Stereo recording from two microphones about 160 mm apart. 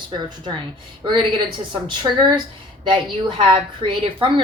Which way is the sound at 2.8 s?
30° right (ahead or behind).